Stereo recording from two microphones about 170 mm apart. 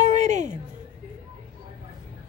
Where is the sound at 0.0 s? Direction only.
45° right (ahead or behind).